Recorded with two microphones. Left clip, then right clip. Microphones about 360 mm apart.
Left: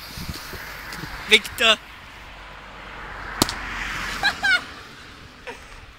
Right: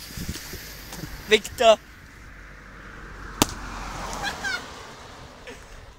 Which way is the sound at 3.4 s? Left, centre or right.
Centre.